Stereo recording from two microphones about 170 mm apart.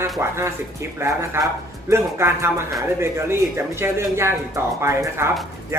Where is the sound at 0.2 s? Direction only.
15° right (ahead or behind).